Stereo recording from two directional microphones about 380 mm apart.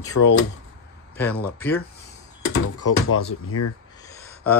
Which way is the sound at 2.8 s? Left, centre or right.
Left.